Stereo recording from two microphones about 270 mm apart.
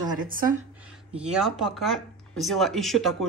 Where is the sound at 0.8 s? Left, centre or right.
Centre.